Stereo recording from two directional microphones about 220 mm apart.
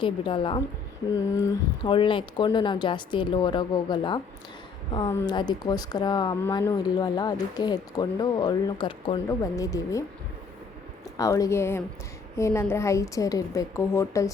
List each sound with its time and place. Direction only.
0.0 s speech: 20° left (ahead or behind)
11.2 s a woman's voice: 15° left (ahead or behind)